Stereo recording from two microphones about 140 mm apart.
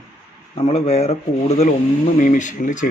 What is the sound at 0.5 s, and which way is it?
Speech, 45° left (ahead or behind).